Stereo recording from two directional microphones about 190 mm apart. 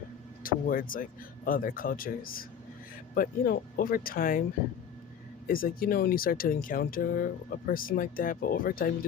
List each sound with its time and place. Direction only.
0.4 s speech: 50° left (ahead or behind)
5.5 s speech: 50° left (ahead or behind)